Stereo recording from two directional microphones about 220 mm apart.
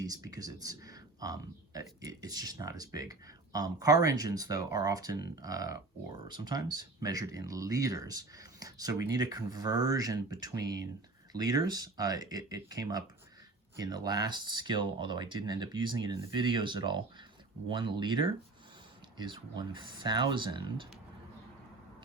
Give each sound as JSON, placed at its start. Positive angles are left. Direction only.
{"t": 0.0, "sound": "speech", "side_deg": -15}